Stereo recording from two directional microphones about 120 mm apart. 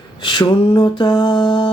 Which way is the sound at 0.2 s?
40° left (ahead or behind).